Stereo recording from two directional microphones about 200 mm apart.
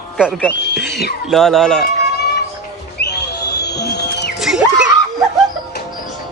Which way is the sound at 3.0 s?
55° left (ahead or behind).